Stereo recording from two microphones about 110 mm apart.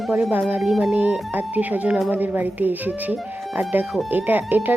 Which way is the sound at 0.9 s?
15° right (ahead or behind).